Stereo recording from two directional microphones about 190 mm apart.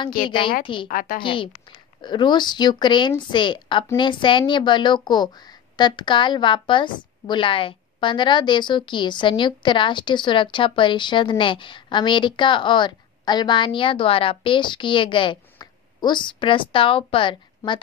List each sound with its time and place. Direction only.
0.8 s a woman's voice: 45° left (ahead or behind)
1.2 s a woman's voice: 25° left (ahead or behind)